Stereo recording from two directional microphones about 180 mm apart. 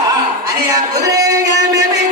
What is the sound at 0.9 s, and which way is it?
Music, 20° right (ahead or behind).